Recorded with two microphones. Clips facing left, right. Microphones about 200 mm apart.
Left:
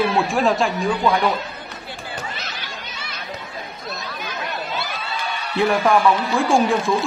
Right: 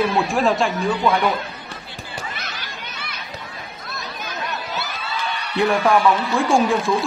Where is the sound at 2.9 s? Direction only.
55° right (ahead or behind).